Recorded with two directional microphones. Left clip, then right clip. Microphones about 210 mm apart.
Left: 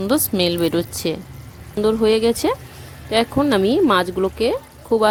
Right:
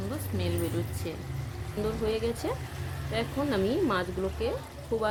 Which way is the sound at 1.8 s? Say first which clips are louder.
Left 14 dB; 50° left (ahead or behind).